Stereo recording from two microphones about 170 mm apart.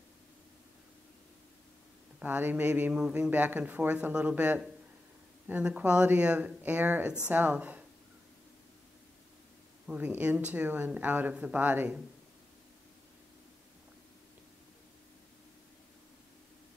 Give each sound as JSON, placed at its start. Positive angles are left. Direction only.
{"t": 2.1, "sound": "a man's voice", "side_deg": -10}
{"t": 9.8, "sound": "a man's voice", "side_deg": -10}